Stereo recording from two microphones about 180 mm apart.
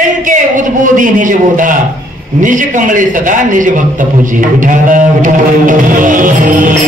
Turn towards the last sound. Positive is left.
turn(degrees=-50)  # may be behind; listen again after turning